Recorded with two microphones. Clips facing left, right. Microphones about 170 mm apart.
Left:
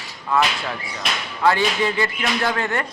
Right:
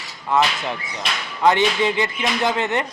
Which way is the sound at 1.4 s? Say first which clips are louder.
Right 2 dB; 20° right (ahead or behind).